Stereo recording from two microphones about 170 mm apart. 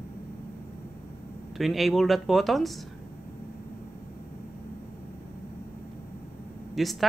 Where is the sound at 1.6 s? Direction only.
Centre (ahead or behind).